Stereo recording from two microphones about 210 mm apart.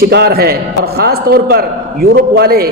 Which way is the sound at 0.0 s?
50° right (ahead or behind).